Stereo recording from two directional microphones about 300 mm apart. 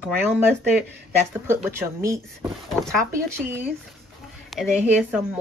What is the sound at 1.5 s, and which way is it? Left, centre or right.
Speech, centre.